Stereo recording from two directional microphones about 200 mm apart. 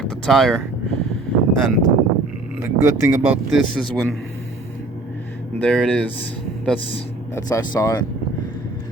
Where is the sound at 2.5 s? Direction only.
10° right (ahead or behind); by 4.2 s 5° left (ahead or behind).